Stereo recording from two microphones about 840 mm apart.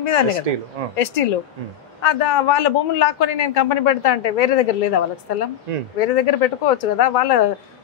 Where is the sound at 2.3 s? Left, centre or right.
Left.